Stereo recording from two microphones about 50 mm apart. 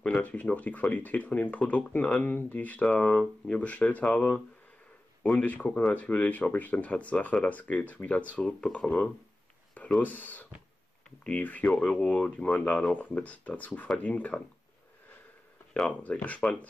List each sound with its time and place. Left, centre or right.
0.1 s speech: left
2.2 s speech: left
5.4 s speech: left
9.9 s speech: left
15.7 s speech: left